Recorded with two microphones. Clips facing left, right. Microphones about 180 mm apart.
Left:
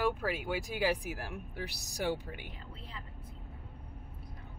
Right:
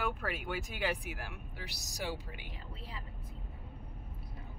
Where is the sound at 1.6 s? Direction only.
50° left (ahead or behind).